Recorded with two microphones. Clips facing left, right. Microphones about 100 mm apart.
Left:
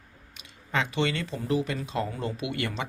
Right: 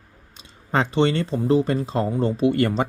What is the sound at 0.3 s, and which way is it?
Speech, 35° right (ahead or behind).